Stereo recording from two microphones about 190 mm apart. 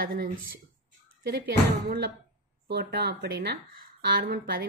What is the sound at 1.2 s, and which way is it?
A woman's voice, 60° right (ahead or behind).